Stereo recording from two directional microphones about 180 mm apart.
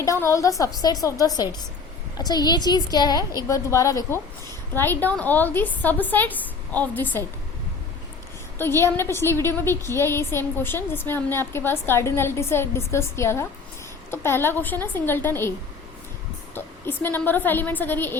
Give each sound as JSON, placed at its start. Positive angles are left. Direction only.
{"t": 0.0, "sound": "a woman's voice", "side_deg": 15}
{"t": 8.5, "sound": "a woman's voice", "side_deg": 15}
{"t": 16.6, "sound": "a woman's voice", "side_deg": 10}